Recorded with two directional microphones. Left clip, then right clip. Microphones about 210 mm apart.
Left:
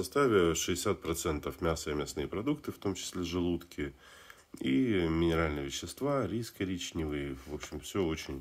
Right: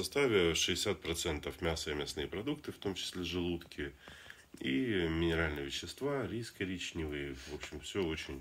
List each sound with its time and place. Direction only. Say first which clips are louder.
0.0 s speech: left 3 dB; 45° left (ahead or behind)